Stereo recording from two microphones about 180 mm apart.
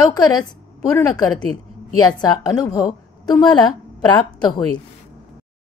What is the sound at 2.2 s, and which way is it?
A woman's voice, 20° left (ahead or behind).